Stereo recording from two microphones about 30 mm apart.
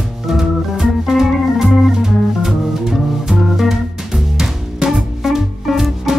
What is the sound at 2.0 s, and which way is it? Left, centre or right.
Music, centre.